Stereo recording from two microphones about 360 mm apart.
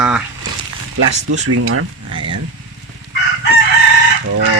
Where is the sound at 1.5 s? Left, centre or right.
Right.